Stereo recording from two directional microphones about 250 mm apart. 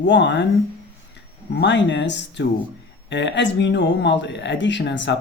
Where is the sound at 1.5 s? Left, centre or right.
Left.